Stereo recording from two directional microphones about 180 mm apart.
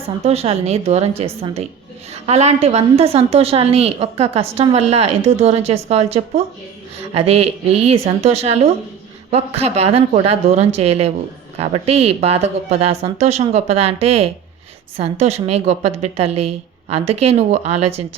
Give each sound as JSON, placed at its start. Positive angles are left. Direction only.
{"t": 0.3, "sound": "a woman's voice", "side_deg": -35}